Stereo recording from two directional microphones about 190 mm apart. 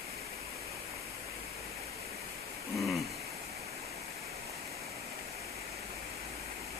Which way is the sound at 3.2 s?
35° right (ahead or behind).